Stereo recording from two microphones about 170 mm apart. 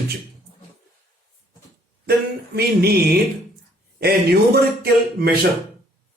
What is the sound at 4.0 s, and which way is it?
Speech, 65° right (ahead or behind).